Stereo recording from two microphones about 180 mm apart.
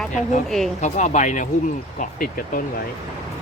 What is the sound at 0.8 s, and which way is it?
Speech, 40° left (ahead or behind).